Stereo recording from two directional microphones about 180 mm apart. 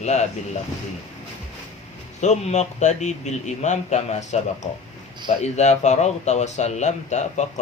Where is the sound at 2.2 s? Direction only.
40° left (ahead or behind).